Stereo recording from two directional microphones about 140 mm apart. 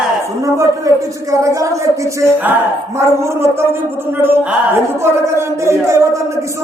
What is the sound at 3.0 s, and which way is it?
Speech, 20° right (ahead or behind).